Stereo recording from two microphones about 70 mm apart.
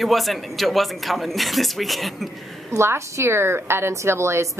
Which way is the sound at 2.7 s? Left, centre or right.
Right.